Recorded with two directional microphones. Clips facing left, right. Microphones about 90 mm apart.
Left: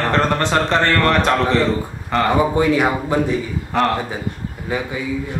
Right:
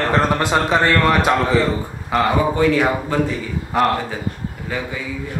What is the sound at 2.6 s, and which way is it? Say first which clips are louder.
Speech: even; 15° left (ahead or behind).